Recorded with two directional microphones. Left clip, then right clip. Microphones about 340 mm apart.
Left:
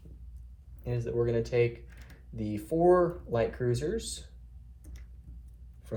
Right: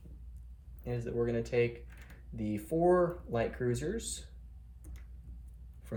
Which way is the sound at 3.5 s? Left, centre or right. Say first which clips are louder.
Left 3 dB; centre.